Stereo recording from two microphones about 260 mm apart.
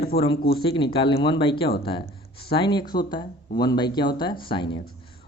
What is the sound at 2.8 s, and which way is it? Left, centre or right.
Speech, left.